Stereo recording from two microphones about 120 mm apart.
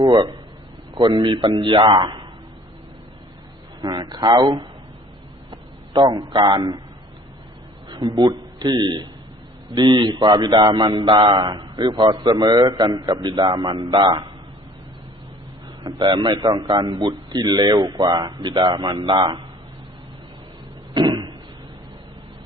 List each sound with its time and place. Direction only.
0.0 s speech: 40° right (ahead or behind)
3.8 s a man's voice: 35° right (ahead or behind)
7.9 s a man's voice: 40° right (ahead or behind)
15.8 s speech: 40° right (ahead or behind)
20.9 s a sound: 40° right (ahead or behind)